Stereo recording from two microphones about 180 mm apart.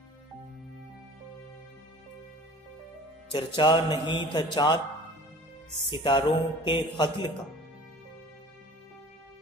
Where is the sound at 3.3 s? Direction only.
25° left (ahead or behind).